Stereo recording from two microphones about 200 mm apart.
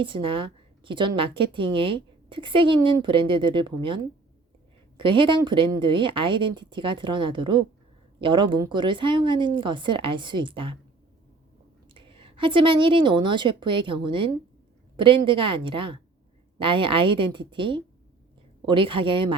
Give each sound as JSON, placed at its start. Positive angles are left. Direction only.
{"t": 0.0, "sound": "speech", "side_deg": -25}
{"t": 11.9, "sound": "a woman's voice", "side_deg": -25}